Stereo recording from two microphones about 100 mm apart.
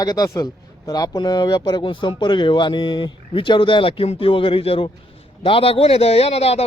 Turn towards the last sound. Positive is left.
turn(degrees=90)